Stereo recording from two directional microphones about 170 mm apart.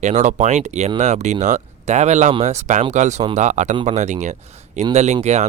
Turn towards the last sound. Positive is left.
turn(degrees=-40)  # may be behind; listen again after turning